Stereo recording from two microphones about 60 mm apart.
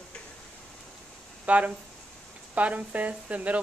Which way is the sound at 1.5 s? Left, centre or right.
Right.